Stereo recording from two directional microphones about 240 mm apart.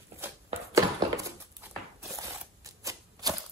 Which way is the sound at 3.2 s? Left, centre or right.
Centre.